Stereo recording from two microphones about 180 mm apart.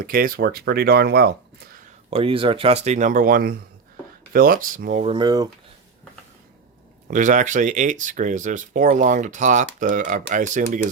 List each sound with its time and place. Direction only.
0.0 s speech: 50° right (ahead or behind)
2.0 s speech: 30° right (ahead or behind); by 5.0 s 45° right (ahead or behind)
5.0 s speech: 25° right (ahead or behind)
7.1 s speech: 45° right (ahead or behind)